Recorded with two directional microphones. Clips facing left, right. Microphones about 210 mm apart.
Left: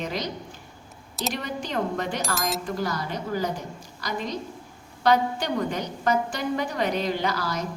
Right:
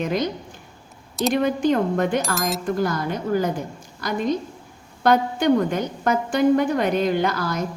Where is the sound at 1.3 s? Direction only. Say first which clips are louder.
Right 11 dB; 50° right (ahead or behind).